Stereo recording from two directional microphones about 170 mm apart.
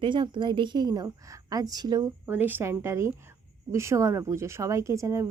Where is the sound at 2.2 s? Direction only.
10° right (ahead or behind).